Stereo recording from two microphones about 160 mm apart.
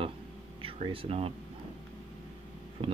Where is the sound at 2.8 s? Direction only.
35° right (ahead or behind).